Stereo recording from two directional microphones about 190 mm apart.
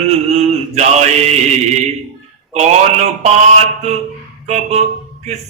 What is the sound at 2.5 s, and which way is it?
Mantra, 35° right (ahead or behind).